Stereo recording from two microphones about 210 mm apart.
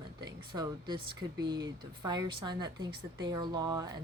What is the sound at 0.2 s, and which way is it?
Speech, 20° right (ahead or behind).